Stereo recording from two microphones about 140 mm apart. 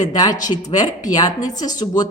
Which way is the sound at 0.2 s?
25° left (ahead or behind).